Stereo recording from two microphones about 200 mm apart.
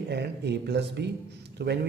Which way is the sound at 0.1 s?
55° right (ahead or behind).